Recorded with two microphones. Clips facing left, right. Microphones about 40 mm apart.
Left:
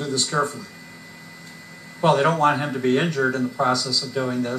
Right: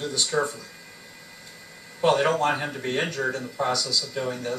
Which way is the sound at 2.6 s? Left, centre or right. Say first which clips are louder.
Left 6 dB; left.